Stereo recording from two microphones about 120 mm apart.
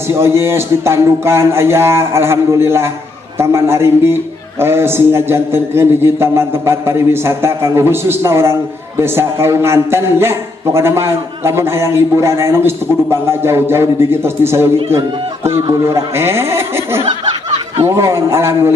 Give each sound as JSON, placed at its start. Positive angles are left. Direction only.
{"t": 0.1, "sound": "a man's voice", "side_deg": -20}
{"t": 15.8, "sound": "a man's voice", "side_deg": -20}